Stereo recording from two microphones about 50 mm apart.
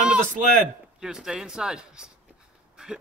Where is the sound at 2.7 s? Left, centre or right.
Centre.